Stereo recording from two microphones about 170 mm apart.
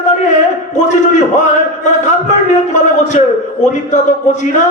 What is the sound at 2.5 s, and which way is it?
A man's voice, 45° left (ahead or behind).